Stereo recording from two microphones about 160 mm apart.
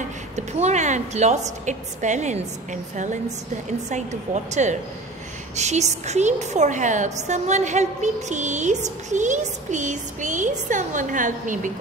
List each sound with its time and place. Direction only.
0.4 s a woman's voice: 45° right (ahead or behind)